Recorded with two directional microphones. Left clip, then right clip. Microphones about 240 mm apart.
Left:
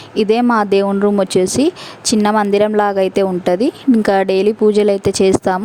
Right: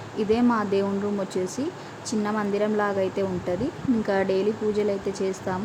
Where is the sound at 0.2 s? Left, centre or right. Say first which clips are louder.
Left 10 dB; left.